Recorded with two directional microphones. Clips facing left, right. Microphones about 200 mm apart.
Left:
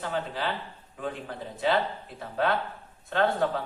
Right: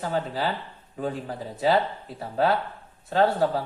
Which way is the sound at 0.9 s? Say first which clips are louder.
Right 5 dB; 40° right (ahead or behind).